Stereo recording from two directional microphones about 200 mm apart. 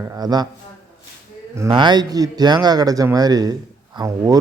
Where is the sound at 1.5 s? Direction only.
20° right (ahead or behind).